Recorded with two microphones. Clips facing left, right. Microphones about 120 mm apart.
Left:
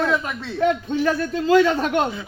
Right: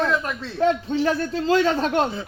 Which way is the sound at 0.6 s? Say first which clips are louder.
Even; 30° right (ahead or behind).